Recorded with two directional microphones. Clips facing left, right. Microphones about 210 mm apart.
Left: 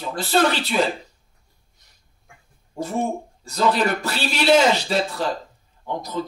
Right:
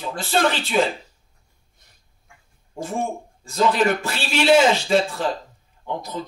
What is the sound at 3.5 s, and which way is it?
A man's voice, 40° left (ahead or behind).